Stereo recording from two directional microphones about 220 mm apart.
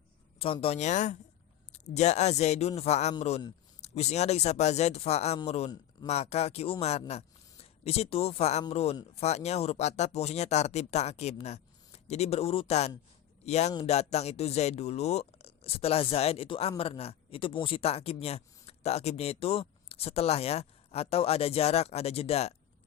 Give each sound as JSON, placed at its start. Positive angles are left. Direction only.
{"t": 0.3, "sound": "a man's voice", "side_deg": 25}